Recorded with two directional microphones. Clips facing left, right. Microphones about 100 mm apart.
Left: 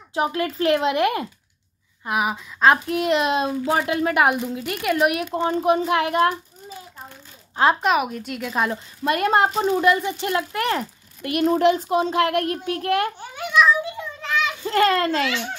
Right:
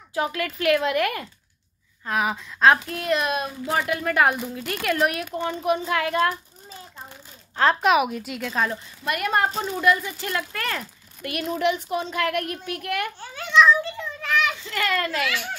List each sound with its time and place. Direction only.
0.1 s speech: 25° left (ahead or behind)
2.0 s speech: 10° left (ahead or behind)
2.9 s speech: 25° left (ahead or behind)
7.8 s speech: 5° right (ahead or behind)
8.5 s speech: 10° left (ahead or behind)
9.0 s speech: 25° left (ahead or behind)
11.4 s speech: 35° left (ahead or behind)
13.2 s children playing: 15° left (ahead or behind)
14.7 s speech: 30° left (ahead or behind)